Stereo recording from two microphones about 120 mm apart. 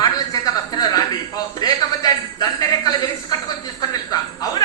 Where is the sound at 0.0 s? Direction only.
30° left (ahead or behind).